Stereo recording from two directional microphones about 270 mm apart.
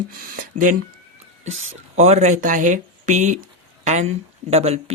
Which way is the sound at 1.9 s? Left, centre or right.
Right.